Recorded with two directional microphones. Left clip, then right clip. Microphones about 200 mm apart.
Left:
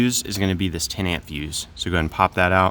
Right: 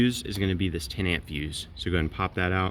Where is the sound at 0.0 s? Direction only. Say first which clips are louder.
Left 5 dB; 40° left (ahead or behind).